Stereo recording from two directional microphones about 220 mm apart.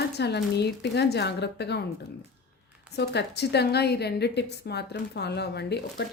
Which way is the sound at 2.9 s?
50° left (ahead or behind).